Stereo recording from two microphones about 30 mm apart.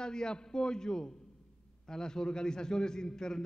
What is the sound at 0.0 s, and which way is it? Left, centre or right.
A man's voice, left.